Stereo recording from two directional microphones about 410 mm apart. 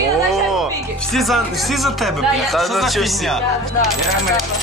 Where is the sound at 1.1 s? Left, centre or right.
Centre.